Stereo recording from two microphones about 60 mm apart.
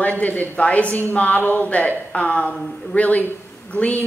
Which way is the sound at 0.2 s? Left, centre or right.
Left.